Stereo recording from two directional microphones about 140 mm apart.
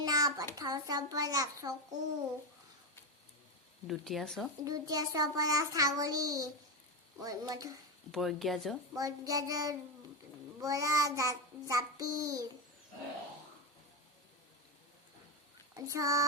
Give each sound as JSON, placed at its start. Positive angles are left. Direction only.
{"t": 0.0, "sound": "a sound", "side_deg": -25}
{"t": 0.5, "sound": "a child's voice", "side_deg": -25}
{"t": 3.8, "sound": "speech", "side_deg": 0}
{"t": 4.6, "sound": "a child's voice", "side_deg": -25}
{"t": 8.1, "sound": "speech", "side_deg": 0}
{"t": 9.0, "sound": "a child's voice", "side_deg": -25}
{"t": 15.7, "sound": "a child's voice", "side_deg": -20}